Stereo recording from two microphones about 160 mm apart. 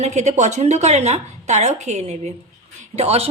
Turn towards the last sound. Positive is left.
turn(degrees=-40)  # may be behind; listen again after turning